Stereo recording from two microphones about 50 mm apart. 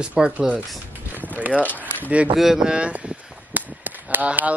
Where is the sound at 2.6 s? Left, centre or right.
Centre.